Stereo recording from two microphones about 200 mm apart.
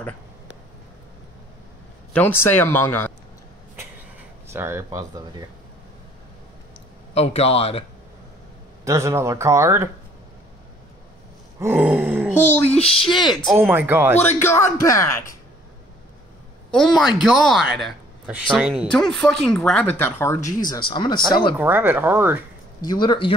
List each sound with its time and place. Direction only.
2.1 s speech: 10° left (ahead or behind)
4.5 s speech: 15° right (ahead or behind)
7.2 s speech: 30° left (ahead or behind)
8.8 s speech: 15° right (ahead or behind)
11.6 s groan: 10° right (ahead or behind)
12.4 s speech: 35° left (ahead or behind)
13.0 s speech: centre (ahead or behind)
14.1 s speech: 10° left (ahead or behind)
17.2 s speech: centre (ahead or behind); by 21.5 s 20° left (ahead or behind)
21.5 s speech: 10° right (ahead or behind)
22.8 s speech: 20° left (ahead or behind)